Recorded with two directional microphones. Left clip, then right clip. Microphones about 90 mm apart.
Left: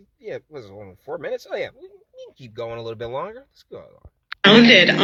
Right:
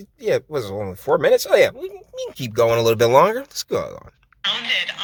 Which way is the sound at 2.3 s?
15° right (ahead or behind).